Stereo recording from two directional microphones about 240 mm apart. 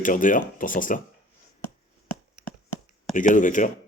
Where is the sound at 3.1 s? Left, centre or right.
Left.